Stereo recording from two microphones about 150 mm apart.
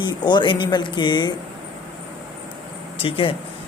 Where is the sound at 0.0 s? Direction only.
30° left (ahead or behind).